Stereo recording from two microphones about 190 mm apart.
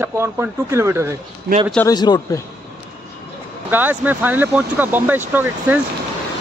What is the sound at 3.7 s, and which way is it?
Speech, 10° right (ahead or behind).